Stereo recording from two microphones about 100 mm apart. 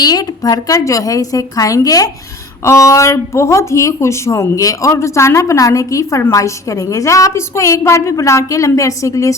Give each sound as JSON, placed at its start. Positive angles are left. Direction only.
{"t": 0.0, "sound": "a woman's voice", "side_deg": 40}